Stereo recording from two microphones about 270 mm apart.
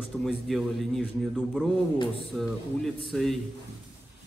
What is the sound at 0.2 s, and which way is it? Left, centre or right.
Speech, centre.